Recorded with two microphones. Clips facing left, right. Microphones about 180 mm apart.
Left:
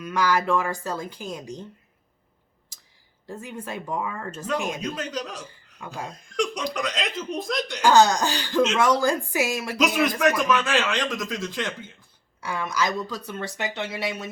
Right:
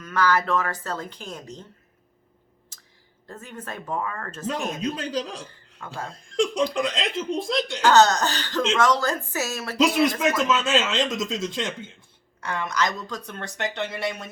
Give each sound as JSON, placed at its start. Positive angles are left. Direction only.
{"t": 0.0, "sound": "speech", "side_deg": 15}
{"t": 3.2, "sound": "speech", "side_deg": 10}
{"t": 4.9, "sound": "a man's voice", "side_deg": -30}
{"t": 7.8, "sound": "speech", "side_deg": 10}
{"t": 9.7, "sound": "speech", "side_deg": -25}
{"t": 12.4, "sound": "speech", "side_deg": 10}